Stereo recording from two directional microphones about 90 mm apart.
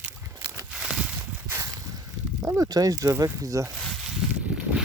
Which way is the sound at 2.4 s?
35° right (ahead or behind).